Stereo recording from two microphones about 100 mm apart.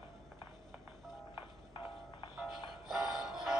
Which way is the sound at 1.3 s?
60° left (ahead or behind).